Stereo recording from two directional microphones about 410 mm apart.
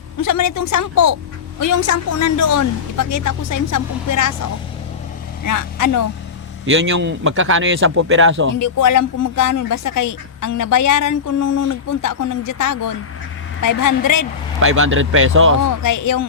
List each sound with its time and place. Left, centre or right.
0.2 s speech: left
5.5 s speech: left
6.7 s speech: right
8.5 s speech: left
14.6 s speech: right
15.8 s speech: left